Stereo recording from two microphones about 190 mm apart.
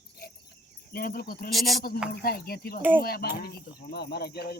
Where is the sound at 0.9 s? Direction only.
50° left (ahead or behind).